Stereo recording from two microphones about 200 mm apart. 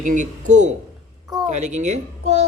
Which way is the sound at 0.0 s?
40° right (ahead or behind).